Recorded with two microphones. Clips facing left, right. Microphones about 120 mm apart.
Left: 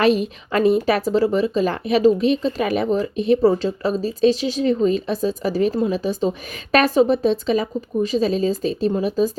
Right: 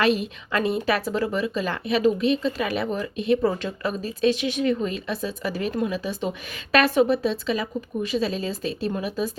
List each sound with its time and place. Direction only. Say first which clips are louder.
0.5 s speech: left 6 dB; 40° left (ahead or behind)